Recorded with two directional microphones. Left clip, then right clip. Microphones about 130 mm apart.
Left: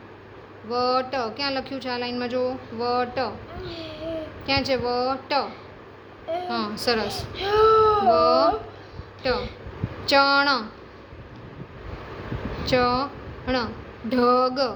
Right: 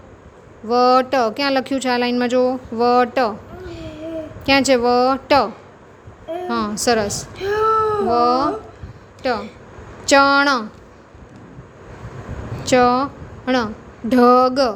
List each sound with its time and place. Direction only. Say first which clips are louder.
0.7 s speech: right 9 dB; 70° right (ahead or behind)
4.4 s speech: right 9 dB; 90° right
6.5 s a woman's voice: right 8 dB; 60° right (ahead or behind)
7.3 s a sound: even; 55° left (ahead or behind)
8.1 s a woman's voice: right 2 dB; 55° right (ahead or behind)
12.6 s a woman's voice: right 7 dB; 60° right (ahead or behind)